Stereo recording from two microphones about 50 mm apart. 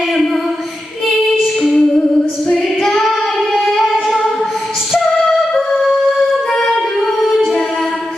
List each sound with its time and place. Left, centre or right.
1.0 s female singing: centre
2.9 s singing: centre
4.9 s music: centre
7.2 s music: centre